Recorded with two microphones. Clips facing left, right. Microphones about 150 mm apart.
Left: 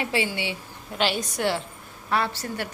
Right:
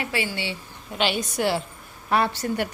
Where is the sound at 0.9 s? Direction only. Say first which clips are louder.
Right 1 dB; centre (ahead or behind).